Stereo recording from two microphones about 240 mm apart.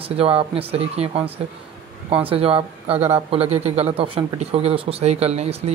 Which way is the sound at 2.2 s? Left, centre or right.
Right.